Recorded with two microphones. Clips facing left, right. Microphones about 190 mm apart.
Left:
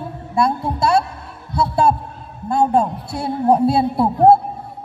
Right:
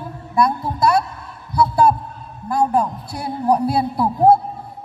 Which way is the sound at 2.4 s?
25° left (ahead or behind).